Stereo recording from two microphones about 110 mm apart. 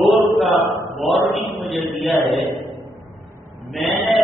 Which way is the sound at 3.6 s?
Centre (ahead or behind).